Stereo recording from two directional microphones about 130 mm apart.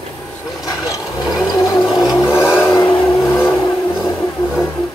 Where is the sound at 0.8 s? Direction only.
25° left (ahead or behind).